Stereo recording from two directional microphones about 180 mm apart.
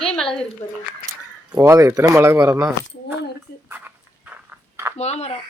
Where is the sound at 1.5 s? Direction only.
15° right (ahead or behind).